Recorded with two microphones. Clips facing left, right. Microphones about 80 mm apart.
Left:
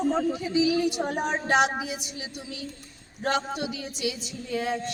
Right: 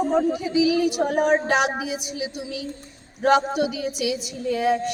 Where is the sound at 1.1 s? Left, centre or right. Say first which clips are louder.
Right 9 dB; right.